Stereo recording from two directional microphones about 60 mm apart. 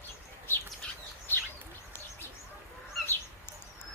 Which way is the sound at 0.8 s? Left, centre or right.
Centre.